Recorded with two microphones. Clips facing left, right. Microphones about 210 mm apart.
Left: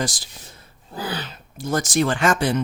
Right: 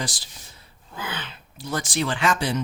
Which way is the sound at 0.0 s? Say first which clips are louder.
Left 5 dB; 45° left (ahead or behind).